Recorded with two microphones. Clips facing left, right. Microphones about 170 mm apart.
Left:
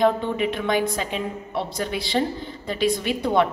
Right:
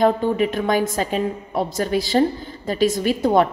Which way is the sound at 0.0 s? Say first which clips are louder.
Right 3 dB; 45° right (ahead or behind).